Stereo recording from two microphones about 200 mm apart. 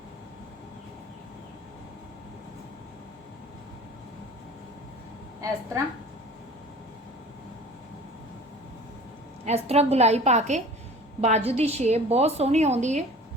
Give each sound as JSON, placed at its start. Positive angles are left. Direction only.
{"t": 5.4, "sound": "a woman's voice", "side_deg": -15}
{"t": 9.4, "sound": "a woman's voice", "side_deg": -30}